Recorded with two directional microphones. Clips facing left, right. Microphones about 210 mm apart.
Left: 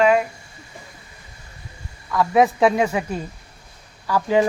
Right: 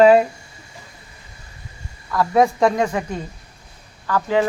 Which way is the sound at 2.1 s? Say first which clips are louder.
Even; centre (ahead or behind).